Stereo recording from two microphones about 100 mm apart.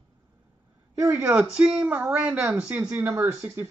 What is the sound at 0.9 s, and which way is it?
Speech, 30° right (ahead or behind).